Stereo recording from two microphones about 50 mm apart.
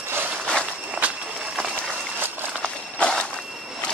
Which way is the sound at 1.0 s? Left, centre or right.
Right.